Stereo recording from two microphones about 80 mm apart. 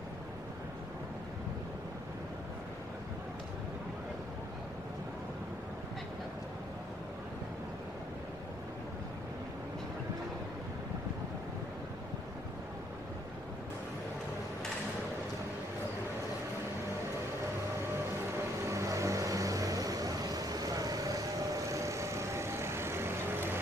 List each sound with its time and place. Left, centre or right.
18.7 s vehicle: right
21.6 s vehicle: right